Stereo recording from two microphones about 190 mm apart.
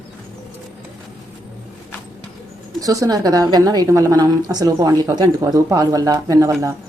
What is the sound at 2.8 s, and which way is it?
Speech, 20° right (ahead or behind).